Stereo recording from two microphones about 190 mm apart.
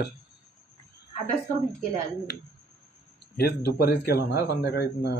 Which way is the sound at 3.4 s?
55° left (ahead or behind).